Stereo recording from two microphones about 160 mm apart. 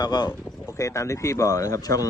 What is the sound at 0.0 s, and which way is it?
Speech, 25° left (ahead or behind).